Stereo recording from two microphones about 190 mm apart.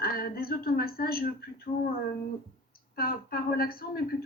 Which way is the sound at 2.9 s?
50° left (ahead or behind).